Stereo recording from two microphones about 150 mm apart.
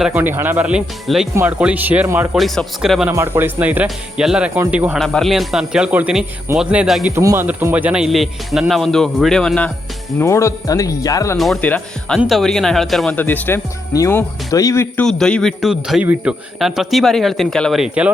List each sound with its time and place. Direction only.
0.1 s speech: 15° right (ahead or behind)
2.3 s speech: centre (ahead or behind)
3.1 s speech: 15° right (ahead or behind)
4.9 s speech: centre (ahead or behind)
7.2 s speech: 20° right (ahead or behind)
7.4 s speech: 10° right (ahead or behind); by 9.7 s 5° left (ahead or behind)
10.2 s speech: 20° left (ahead or behind)
11.3 s speech: centre (ahead or behind); by 14.8 s 20° left (ahead or behind)
14.9 s speech: 5° left (ahead or behind)